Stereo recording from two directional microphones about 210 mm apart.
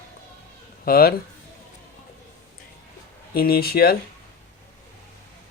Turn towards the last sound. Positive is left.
turn(degrees=45)  # may be behind; listen again after turning